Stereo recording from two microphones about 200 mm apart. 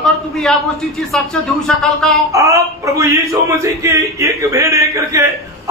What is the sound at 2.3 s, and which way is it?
A man's voice, 15° right (ahead or behind).